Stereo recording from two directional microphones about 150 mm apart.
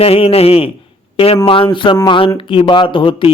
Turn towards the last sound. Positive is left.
turn(degrees=35)  # may be behind; listen again after turning